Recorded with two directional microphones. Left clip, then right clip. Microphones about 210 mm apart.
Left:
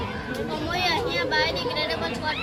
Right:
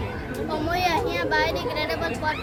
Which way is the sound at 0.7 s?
Centre (ahead or behind).